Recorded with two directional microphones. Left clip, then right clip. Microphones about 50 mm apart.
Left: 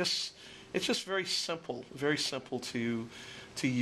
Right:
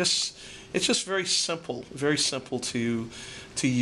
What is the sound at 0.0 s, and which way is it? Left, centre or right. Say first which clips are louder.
Speech: right 7 dB; left.